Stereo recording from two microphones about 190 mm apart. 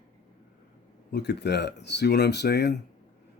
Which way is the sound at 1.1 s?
60° left (ahead or behind).